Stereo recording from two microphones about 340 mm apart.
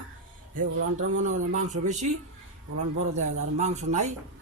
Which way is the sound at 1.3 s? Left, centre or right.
Right.